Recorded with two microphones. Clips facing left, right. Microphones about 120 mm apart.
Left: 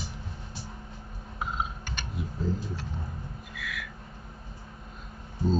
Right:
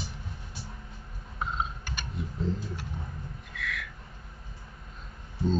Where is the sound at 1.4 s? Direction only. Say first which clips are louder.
Even; centre (ahead or behind).